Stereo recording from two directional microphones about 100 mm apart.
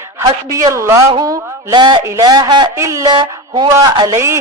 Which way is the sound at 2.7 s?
30° right (ahead or behind).